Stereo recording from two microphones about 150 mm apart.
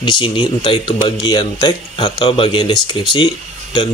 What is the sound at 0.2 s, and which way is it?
A man's voice, 35° left (ahead or behind).